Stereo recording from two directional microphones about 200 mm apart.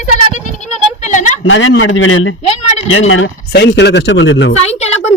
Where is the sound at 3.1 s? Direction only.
65° left (ahead or behind).